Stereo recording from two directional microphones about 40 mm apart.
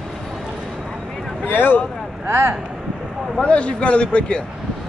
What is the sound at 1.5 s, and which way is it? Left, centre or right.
Speech, left.